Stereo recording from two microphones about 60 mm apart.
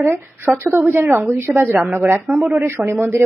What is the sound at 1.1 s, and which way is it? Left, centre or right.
Speech, right.